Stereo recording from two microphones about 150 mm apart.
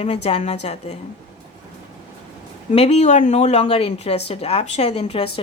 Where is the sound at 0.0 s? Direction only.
40° left (ahead or behind).